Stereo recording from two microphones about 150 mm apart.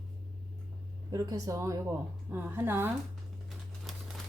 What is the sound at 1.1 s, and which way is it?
A woman's voice, 25° right (ahead or behind).